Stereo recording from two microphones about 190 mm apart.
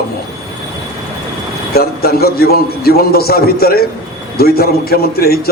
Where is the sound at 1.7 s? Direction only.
55° left (ahead or behind).